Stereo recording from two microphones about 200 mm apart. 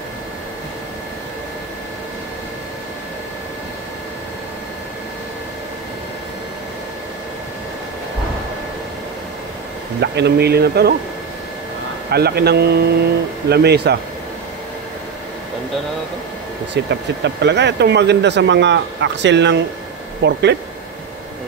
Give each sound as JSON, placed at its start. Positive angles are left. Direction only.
{"t": 9.9, "sound": "speech", "side_deg": -55}
{"t": 12.1, "sound": "speech", "side_deg": -50}
{"t": 16.7, "sound": "speech", "side_deg": -60}